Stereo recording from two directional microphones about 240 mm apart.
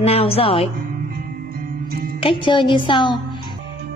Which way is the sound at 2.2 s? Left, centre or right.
Centre.